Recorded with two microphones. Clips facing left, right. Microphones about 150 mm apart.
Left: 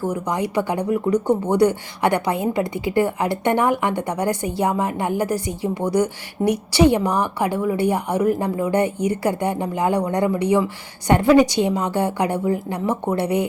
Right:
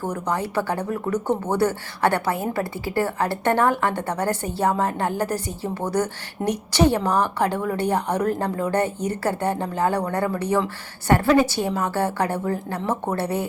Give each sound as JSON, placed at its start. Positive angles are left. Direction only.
{"t": 0.1, "sound": "speech", "side_deg": 15}